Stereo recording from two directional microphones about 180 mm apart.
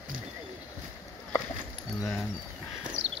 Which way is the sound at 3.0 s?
90° right.